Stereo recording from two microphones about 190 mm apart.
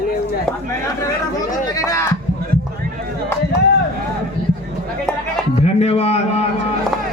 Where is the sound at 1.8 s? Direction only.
15° left (ahead or behind).